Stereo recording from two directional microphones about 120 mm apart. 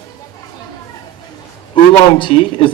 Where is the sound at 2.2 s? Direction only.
45° left (ahead or behind).